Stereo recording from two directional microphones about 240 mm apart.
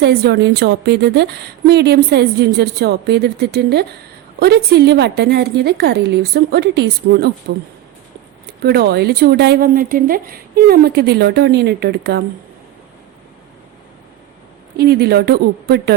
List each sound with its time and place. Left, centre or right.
0.0 s a woman's voice: right
14.8 s a woman's voice: right